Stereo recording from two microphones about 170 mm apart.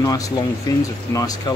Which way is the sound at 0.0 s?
20° left (ahead or behind).